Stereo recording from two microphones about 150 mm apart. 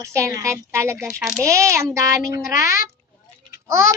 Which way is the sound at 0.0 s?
20° right (ahead or behind).